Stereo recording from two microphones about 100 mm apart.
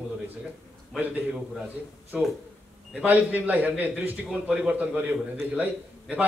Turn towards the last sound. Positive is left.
turn(degrees=-15)  # may be behind; listen again after turning